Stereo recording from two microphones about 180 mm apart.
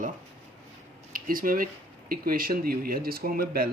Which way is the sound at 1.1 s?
50° right (ahead or behind).